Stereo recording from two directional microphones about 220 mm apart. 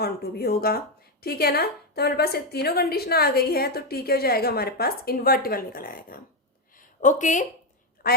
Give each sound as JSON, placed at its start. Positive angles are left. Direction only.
{"t": 0.0, "sound": "a woman's voice", "side_deg": 45}
{"t": 6.7, "sound": "a sound", "side_deg": 35}
{"t": 8.0, "sound": "quack", "side_deg": 45}